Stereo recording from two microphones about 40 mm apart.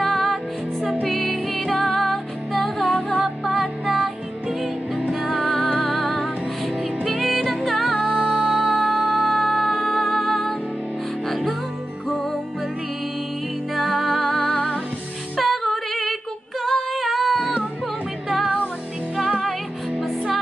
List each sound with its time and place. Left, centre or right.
0.0 s music: centre
5.2 s music: centre
8.3 s music: centre
8.7 s music: centre
13.7 s music: centre
15.3 s female singing: centre
16.6 s singing: centre
19.1 s music: centre